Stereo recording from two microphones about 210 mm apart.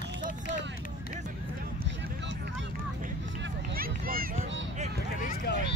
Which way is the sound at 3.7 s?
45° right (ahead or behind).